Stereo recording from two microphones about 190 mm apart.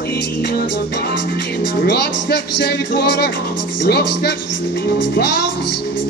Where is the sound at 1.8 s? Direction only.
60° left (ahead or behind).